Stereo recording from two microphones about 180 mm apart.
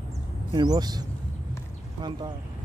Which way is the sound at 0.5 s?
20° right (ahead or behind).